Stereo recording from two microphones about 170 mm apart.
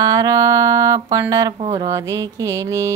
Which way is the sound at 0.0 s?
20° right (ahead or behind).